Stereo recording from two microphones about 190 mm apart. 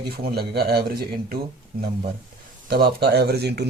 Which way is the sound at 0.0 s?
55° right (ahead or behind).